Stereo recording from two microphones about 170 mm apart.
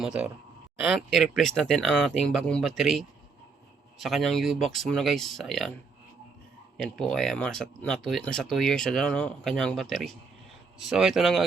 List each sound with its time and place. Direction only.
0.0 s speech: 5° right (ahead or behind)
6.8 s speech: 5° left (ahead or behind)